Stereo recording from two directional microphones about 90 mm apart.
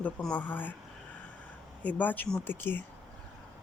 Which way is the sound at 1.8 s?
15° left (ahead or behind).